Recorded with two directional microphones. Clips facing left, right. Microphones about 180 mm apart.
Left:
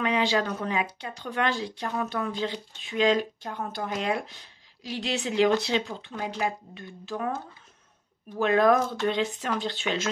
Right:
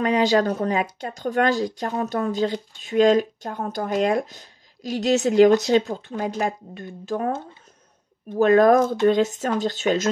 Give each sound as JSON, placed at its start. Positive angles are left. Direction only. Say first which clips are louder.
{"t": 0.0, "sound": "speech", "louder": "right 6 dB", "side_deg": -40}
{"t": 8.4, "sound": "speech", "louder": "right 6 dB", "side_deg": -45}